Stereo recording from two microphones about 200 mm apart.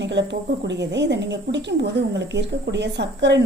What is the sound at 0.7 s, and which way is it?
A woman's voice, 60° right (ahead or behind).